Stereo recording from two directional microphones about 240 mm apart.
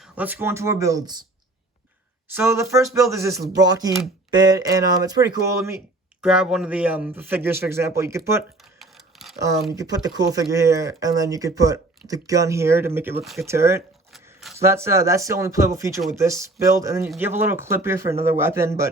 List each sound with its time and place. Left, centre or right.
0.0 s speech: centre
2.3 s speech: centre
8.8 s a sound: centre
9.7 s speech: centre